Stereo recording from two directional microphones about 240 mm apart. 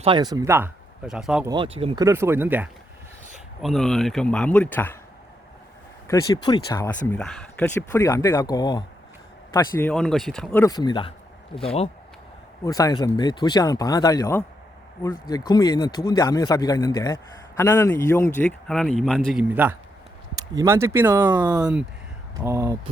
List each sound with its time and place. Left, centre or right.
0.0 s speech: centre
1.5 s speech: right; by 4.9 s centre
6.1 s speech: centre
7.1 s speech: centre